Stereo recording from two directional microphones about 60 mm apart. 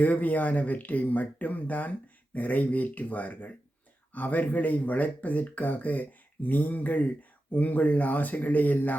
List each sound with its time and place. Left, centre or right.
0.0 s speech: left